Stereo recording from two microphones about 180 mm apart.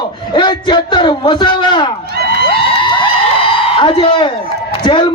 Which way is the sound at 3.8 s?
30° left (ahead or behind).